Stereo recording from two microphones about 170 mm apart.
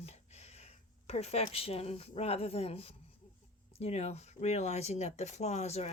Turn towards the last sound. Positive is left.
turn(degrees=40)  # may be behind; listen again after turning